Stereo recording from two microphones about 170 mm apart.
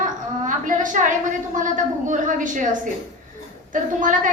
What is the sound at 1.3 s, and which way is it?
A woman's voice, 50° right (ahead or behind).